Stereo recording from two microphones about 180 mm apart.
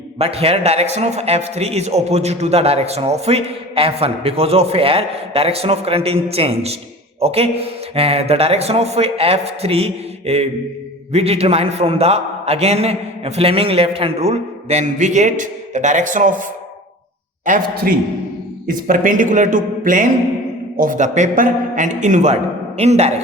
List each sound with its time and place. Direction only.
0.2 s a man's voice: 35° right (ahead or behind)